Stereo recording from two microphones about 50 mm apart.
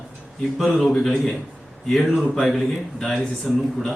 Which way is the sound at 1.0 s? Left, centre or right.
Centre.